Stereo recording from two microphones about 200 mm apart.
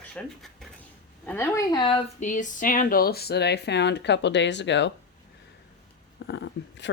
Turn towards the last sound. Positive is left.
turn(degrees=60)  # may be behind; listen again after turning